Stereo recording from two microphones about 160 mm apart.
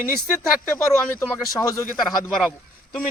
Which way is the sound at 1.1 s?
20° left (ahead or behind).